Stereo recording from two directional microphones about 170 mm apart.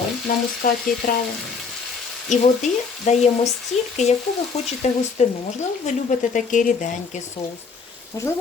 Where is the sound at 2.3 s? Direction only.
45° left (ahead or behind).